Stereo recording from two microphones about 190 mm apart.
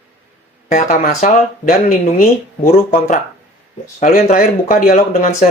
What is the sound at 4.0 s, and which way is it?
A man's voice, 35° left (ahead or behind).